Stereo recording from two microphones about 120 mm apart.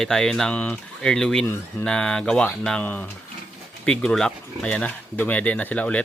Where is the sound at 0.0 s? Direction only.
5° left (ahead or behind).